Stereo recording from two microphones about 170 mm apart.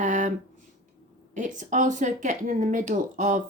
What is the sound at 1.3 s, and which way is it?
Speech, 45° right (ahead or behind).